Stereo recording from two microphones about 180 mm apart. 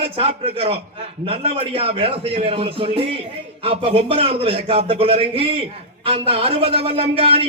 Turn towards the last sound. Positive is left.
turn(degrees=-30)  # may be behind; listen again after turning